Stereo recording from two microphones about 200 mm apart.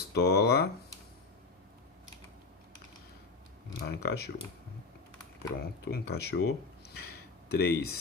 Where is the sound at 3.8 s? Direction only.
55° left (ahead or behind).